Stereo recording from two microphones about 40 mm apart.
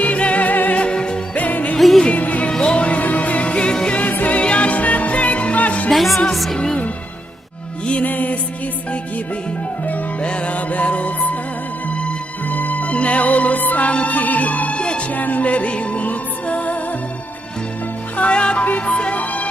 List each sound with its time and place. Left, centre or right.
0.0 s music: left
0.8 s music: left
1.4 s music: left
2.5 s music: left
3.0 s music: left
4.0 s music: left
5.9 s music: centre
8.0 s music: left
10.2 s music: left
14.8 s music: left
15.1 s music: left
18.2 s music: left
19.1 s music: left